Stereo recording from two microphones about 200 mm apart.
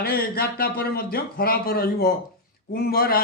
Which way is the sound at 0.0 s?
50° left (ahead or behind).